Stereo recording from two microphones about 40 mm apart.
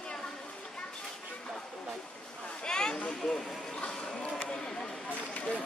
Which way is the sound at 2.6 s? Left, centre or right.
Centre.